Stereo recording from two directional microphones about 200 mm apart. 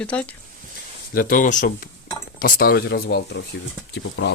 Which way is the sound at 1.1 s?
45° left (ahead or behind).